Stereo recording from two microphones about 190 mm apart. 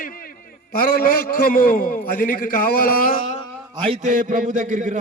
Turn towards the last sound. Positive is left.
turn(degrees=-40)  # may be behind; listen again after turning